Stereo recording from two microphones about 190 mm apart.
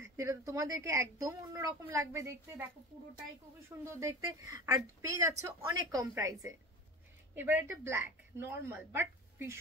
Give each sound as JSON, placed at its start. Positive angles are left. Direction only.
{"t": 0.0, "sound": "a woman's voice", "side_deg": -15}
{"t": 3.8, "sound": "a woman's voice", "side_deg": -15}